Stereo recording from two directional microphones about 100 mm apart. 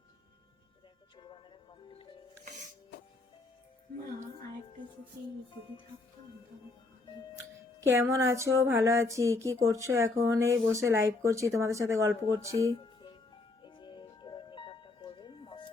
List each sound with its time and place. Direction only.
7.8 s speech: 30° right (ahead or behind)
12.7 s music: 55° left (ahead or behind)